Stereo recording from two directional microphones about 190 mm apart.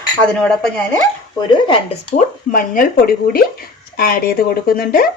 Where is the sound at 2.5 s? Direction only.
45° left (ahead or behind).